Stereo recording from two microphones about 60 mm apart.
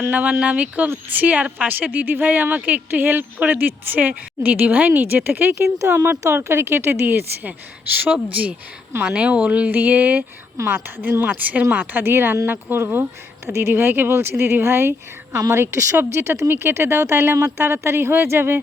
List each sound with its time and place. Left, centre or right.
0.1 s a woman's voice: right
9.0 s a woman's voice: centre; by 16.0 s right
16.0 s a woman's voice: right